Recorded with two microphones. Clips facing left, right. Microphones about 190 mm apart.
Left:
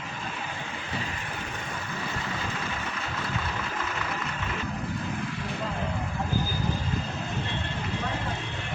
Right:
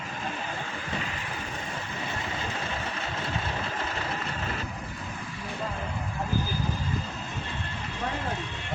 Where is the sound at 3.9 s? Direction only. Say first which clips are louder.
Even; 30° right (ahead or behind).